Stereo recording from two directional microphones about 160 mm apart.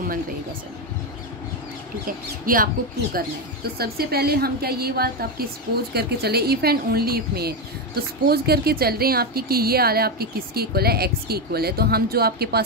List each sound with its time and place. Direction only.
2.0 s speech: 60° right (ahead or behind)
3.7 s speech: 75° right (ahead or behind)
5.9 s speech: 85° right